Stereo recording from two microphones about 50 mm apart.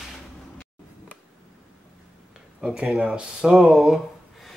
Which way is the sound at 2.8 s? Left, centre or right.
Right.